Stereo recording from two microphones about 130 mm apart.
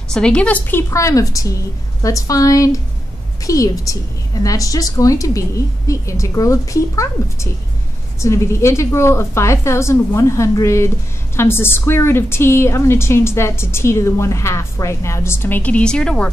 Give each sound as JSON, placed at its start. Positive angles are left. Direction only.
{"t": 0.1, "sound": "a woman's voice", "side_deg": 5}